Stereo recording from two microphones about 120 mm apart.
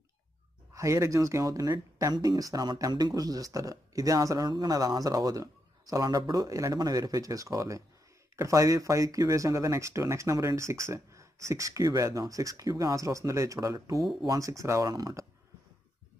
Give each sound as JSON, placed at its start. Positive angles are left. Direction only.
{"t": 0.7, "sound": "speech", "side_deg": -25}